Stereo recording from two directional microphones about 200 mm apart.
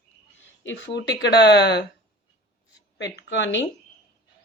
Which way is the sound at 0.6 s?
65° left (ahead or behind).